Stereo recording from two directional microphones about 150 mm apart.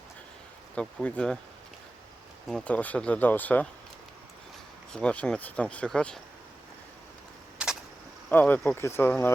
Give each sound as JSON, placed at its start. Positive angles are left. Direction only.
{"t": 0.8, "sound": "speech", "side_deg": 10}
{"t": 2.5, "sound": "speech", "side_deg": 5}
{"t": 4.9, "sound": "speech", "side_deg": 5}
{"t": 7.6, "sound": "a sound", "side_deg": -5}
{"t": 8.3, "sound": "speech", "side_deg": 10}